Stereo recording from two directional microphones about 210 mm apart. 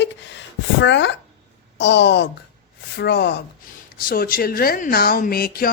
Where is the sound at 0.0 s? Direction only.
55° left (ahead or behind).